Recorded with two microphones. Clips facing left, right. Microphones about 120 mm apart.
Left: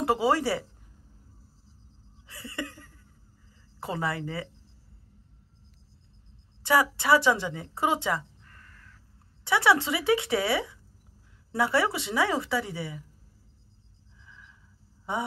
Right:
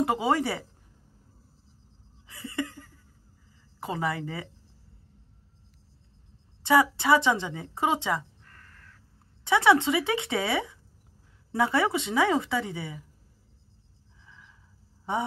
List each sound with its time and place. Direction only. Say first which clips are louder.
0.0 s a woman's voice: left 1 dB; 20° right (ahead or behind)
2.2 s a sound: right 4 dB; 20° right (ahead or behind)
3.8 s a woman's voice: right 1 dB; 20° right (ahead or behind)
6.6 s a woman's voice: right 2 dB; 25° right (ahead or behind)
9.4 s a woman's voice: right 2 dB; 20° right (ahead or behind)